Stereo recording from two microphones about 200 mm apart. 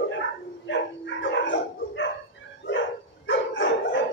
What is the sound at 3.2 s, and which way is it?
Dog, 65° left (ahead or behind).